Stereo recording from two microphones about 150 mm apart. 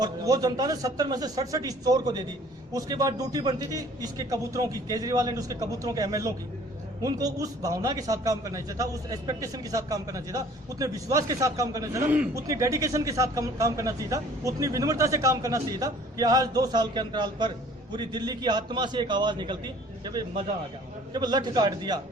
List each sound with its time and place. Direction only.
0.0 s a man's voice: 25° right (ahead or behind)
12.0 s a man's voice: 10° right (ahead or behind)
12.3 s a man's voice: 20° right (ahead or behind)